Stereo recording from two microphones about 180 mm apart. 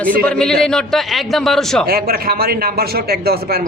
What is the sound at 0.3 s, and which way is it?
Speech, 5° left (ahead or behind).